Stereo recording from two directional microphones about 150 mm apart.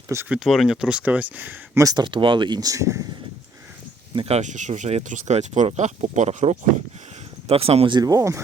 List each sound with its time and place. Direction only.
0.3 s speech: centre (ahead or behind)
1.8 s speech: 25° right (ahead or behind)
4.1 s speech: 35° right (ahead or behind)
4.4 s speech: 55° right (ahead or behind); by 8.4 s 20° right (ahead or behind)